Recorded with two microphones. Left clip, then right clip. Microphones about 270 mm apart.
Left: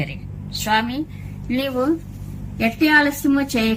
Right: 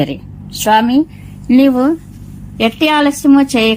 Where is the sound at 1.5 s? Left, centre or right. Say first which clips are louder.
Right 13 dB; centre.